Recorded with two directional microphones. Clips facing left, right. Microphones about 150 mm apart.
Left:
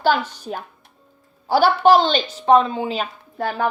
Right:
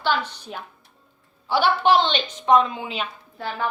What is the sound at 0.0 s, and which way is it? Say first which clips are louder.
A woman's voice: left 5 dB; 45° left (ahead or behind).